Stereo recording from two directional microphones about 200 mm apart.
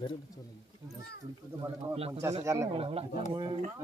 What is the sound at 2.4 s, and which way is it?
Speech, 15° right (ahead or behind).